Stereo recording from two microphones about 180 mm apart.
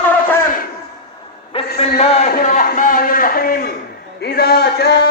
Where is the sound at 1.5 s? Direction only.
30° left (ahead or behind).